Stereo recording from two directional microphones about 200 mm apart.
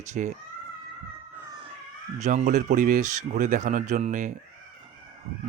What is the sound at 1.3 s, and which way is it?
Cat, 15° right (ahead or behind).